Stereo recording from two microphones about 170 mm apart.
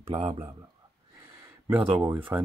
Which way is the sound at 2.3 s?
15° right (ahead or behind).